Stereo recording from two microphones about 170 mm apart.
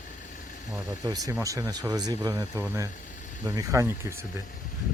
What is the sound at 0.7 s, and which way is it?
Speech, 20° right (ahead or behind).